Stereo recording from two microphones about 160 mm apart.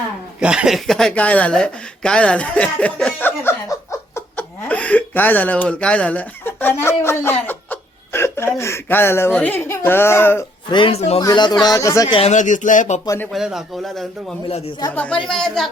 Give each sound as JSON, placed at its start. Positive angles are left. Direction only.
{"t": 0.3, "sound": "speech", "side_deg": -5}
{"t": 10.7, "sound": "speech", "side_deg": 30}
{"t": 11.2, "sound": "speech", "side_deg": 25}
{"t": 12.1, "sound": "speech", "side_deg": 45}
{"t": 13.1, "sound": "speech", "side_deg": 10}
{"t": 13.3, "sound": "a man's voice", "side_deg": 0}
{"t": 14.4, "sound": "speech", "side_deg": 40}
{"t": 14.9, "sound": "a man's voice", "side_deg": 5}